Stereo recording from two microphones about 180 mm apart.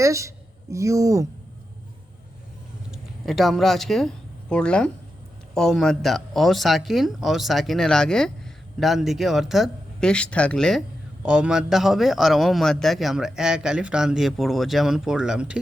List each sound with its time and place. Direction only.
0.0 s speech: 15° right (ahead or behind)
2.9 s speech: centre (ahead or behind)